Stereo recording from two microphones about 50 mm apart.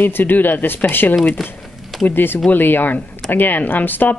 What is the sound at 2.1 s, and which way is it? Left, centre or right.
A woman's voice, left.